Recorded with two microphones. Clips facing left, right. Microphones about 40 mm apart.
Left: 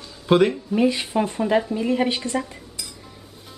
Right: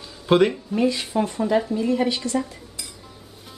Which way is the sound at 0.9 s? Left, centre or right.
Centre.